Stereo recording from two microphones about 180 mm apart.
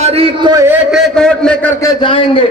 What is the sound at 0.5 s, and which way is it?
Speech, 15° right (ahead or behind).